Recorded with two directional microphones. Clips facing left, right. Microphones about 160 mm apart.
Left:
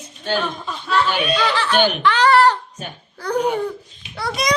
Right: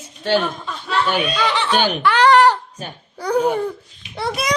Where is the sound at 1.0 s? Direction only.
20° right (ahead or behind).